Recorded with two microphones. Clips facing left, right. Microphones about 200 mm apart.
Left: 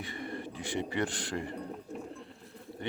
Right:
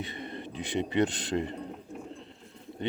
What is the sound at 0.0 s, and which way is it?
Speech, 20° right (ahead or behind).